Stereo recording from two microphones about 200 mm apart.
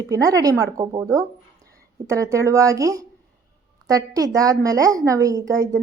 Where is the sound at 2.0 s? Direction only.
15° right (ahead or behind).